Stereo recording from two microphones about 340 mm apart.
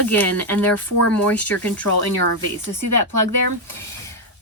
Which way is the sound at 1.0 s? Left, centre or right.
Left.